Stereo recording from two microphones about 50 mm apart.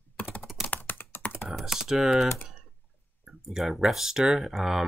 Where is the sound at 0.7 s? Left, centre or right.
Left.